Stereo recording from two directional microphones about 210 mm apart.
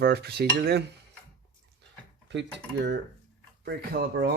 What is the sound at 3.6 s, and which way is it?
Cutlery, 50° right (ahead or behind).